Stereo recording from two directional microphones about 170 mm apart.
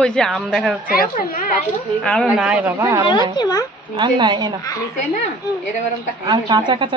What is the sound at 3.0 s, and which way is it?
Speech, 30° left (ahead or behind).